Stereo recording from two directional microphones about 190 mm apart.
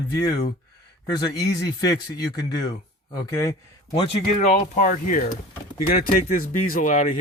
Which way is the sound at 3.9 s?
25° left (ahead or behind).